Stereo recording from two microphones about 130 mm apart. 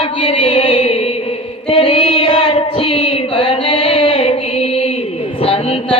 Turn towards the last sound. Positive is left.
turn(degrees=45)  # may be behind; listen again after turning